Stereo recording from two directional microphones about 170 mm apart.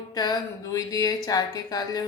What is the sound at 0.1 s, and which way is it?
Speech, 25° left (ahead or behind).